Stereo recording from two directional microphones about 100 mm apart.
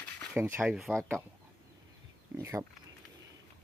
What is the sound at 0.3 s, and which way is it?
Speech, 20° right (ahead or behind).